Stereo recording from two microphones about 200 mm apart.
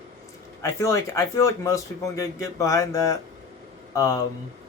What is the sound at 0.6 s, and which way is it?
Speech, 15° left (ahead or behind).